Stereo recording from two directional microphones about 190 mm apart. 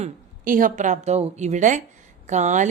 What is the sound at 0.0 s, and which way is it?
A woman's voice, 45° right (ahead or behind).